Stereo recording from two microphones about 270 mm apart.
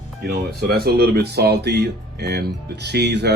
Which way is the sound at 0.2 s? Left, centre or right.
Right.